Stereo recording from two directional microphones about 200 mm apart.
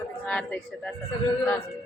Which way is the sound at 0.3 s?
5° left (ahead or behind).